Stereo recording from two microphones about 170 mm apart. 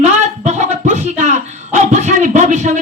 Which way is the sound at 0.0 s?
45° right (ahead or behind).